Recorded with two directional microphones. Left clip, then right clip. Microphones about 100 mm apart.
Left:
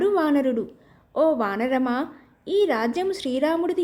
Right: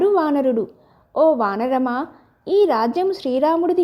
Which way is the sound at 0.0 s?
35° right (ahead or behind).